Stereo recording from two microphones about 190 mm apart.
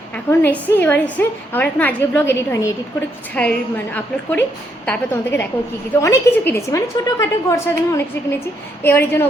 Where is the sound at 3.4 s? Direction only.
5° left (ahead or behind).